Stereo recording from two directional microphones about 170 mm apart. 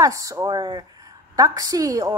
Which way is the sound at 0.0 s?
20° right (ahead or behind).